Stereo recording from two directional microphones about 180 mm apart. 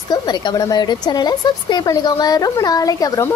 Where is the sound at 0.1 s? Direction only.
25° left (ahead or behind).